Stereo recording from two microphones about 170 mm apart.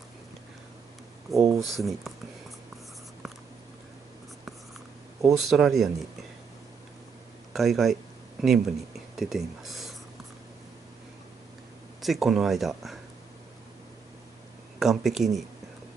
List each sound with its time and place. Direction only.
1.3 s speech: 20° right (ahead or behind)
1.8 s speech: centre (ahead or behind)
5.5 s speech: centre (ahead or behind)
7.5 s speech: centre (ahead or behind)
12.0 s speech: centre (ahead or behind)
14.8 s speech: centre (ahead or behind)